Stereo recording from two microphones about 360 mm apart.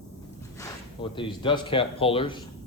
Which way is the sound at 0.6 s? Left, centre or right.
Centre.